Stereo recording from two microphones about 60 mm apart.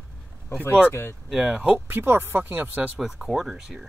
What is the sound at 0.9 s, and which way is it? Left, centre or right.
Speech, left.